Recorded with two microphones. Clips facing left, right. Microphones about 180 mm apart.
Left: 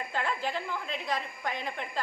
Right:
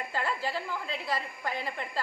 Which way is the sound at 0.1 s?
5° right (ahead or behind).